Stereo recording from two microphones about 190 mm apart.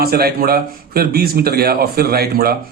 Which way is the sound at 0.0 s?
55° right (ahead or behind).